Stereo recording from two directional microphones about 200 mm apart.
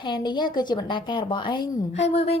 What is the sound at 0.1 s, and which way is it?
A woman's voice, 20° left (ahead or behind).